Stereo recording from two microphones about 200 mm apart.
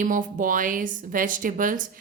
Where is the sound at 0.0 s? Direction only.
40° right (ahead or behind).